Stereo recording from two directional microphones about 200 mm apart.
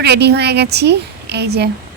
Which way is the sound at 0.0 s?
55° right (ahead or behind).